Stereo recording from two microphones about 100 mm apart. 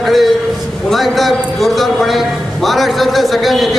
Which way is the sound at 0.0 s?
Centre (ahead or behind).